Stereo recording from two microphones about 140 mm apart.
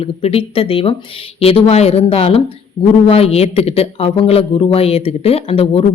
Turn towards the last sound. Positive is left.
turn(degrees=45)  # may be behind; listen again after turning